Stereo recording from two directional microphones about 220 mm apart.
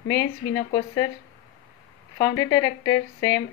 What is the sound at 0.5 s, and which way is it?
Speech, 20° left (ahead or behind).